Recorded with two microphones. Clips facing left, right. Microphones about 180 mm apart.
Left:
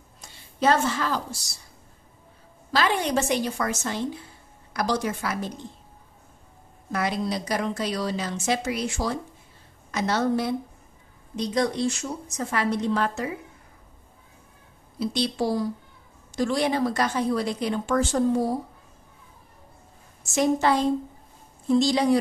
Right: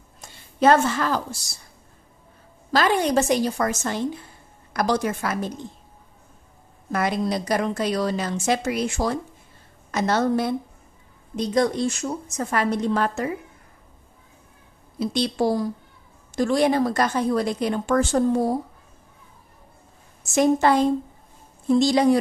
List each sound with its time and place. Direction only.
0.6 s a woman's voice: 55° right (ahead or behind)
2.7 s a woman's voice: 45° right (ahead or behind)
6.9 s a woman's voice: 50° right (ahead or behind)
15.0 s a woman's voice: 50° right (ahead or behind)
20.3 s a woman's voice: 50° right (ahead or behind)